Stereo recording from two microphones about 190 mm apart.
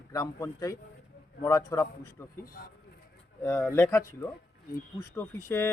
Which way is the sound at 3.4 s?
15° left (ahead or behind).